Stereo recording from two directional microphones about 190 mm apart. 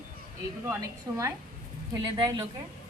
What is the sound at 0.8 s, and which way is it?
A woman's voice, 15° right (ahead or behind).